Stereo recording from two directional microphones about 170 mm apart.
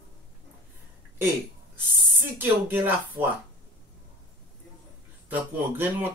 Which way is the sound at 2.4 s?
10° right (ahead or behind).